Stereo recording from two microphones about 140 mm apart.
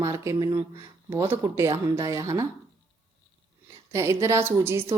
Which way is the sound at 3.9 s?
20° right (ahead or behind).